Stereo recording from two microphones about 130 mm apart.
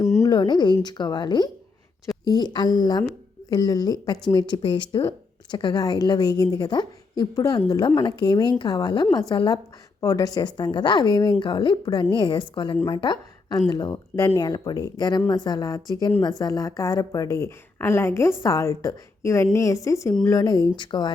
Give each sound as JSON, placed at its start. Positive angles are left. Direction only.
{"t": 0.2, "sound": "a sound", "side_deg": 35}
{"t": 0.9, "sound": "a woman's voice", "side_deg": 35}
{"t": 10.0, "sound": "a woman's voice", "side_deg": 25}